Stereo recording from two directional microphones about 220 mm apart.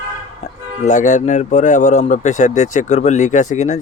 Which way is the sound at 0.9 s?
35° left (ahead or behind).